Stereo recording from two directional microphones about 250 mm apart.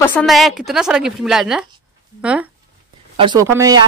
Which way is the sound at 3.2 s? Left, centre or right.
Centre.